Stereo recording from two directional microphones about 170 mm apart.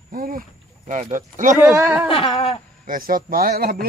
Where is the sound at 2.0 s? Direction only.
35° left (ahead or behind).